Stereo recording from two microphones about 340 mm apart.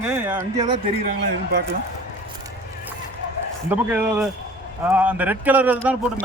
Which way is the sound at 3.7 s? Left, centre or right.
Centre.